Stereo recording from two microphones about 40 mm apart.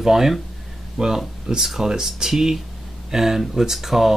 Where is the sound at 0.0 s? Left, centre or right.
Centre.